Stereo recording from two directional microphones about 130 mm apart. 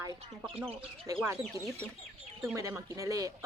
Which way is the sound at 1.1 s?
25° right (ahead or behind).